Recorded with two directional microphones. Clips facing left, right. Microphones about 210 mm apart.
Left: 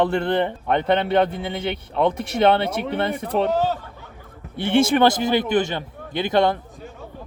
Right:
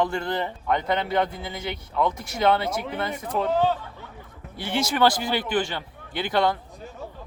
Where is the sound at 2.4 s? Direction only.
30° left (ahead or behind).